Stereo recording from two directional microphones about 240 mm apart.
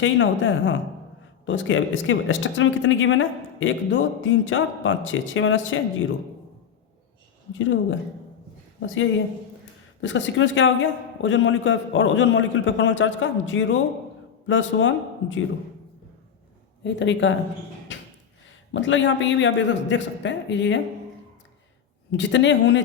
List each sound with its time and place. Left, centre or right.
0.0 s speech: left
7.6 s speech: left
10.0 s speech: left
16.8 s speech: left
17.9 s a sound: left
18.7 s speech: left
22.1 s speech: left